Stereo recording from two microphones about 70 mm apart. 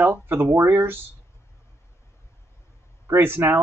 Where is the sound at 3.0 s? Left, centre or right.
Right.